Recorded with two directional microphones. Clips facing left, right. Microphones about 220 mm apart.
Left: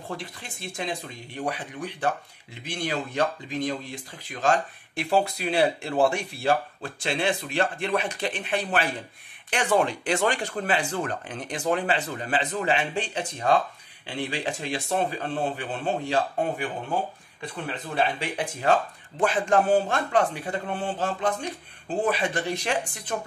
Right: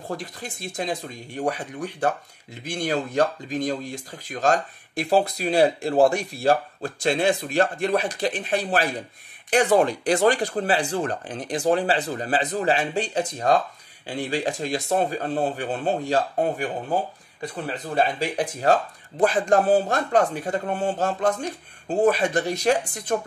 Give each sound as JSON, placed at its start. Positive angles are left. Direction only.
{"t": 0.1, "sound": "speech", "side_deg": -40}